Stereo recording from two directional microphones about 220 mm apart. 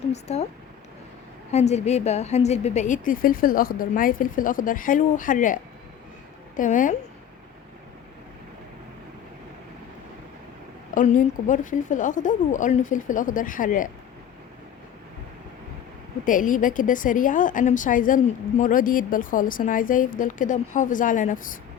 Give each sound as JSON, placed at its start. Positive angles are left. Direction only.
{"t": 0.1, "sound": "speech", "side_deg": 30}
{"t": 1.5, "sound": "a woman's voice", "side_deg": 30}
{"t": 6.6, "sound": "a woman's voice", "side_deg": 35}
{"t": 10.9, "sound": "a woman's voice", "side_deg": 35}
{"t": 16.2, "sound": "a woman's voice", "side_deg": 35}